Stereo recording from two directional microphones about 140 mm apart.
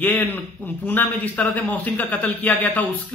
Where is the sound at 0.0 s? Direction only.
15° left (ahead or behind).